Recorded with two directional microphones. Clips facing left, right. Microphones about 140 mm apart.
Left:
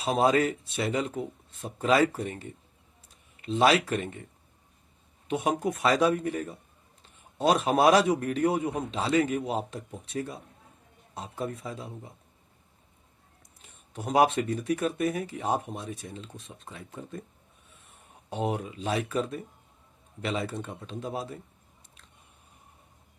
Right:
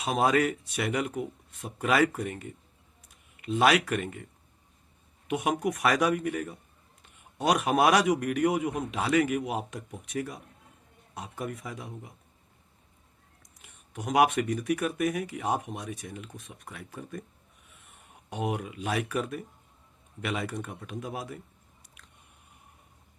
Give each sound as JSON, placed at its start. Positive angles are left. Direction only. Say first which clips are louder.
{"t": 0.0, "sound": "speech", "louder": "left 1 dB", "side_deg": 30}
{"t": 5.3, "sound": "speech", "louder": "even", "side_deg": 30}
{"t": 13.6, "sound": "speech", "louder": "even", "side_deg": 30}
{"t": 18.3, "sound": "speech", "louder": "left 2 dB", "side_deg": 30}